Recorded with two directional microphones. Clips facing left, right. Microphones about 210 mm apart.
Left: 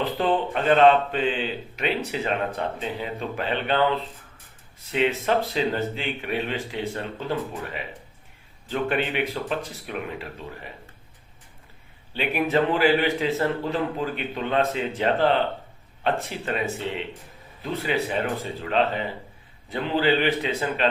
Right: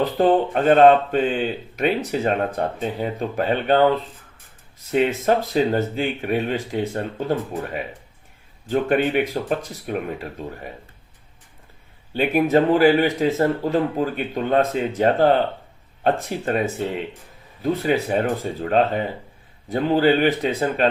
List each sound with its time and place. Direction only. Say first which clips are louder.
0.0 s speech: right 6 dB; 45° right (ahead or behind)
4.9 s speech: right 4 dB; 45° right (ahead or behind)
12.1 s speech: right 6 dB; 45° right (ahead or behind)